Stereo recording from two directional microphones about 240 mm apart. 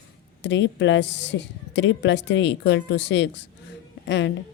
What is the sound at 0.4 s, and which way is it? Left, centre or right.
A woman's voice, left.